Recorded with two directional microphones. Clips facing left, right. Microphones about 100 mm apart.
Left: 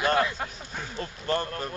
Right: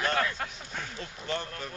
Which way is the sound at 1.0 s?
45° left (ahead or behind).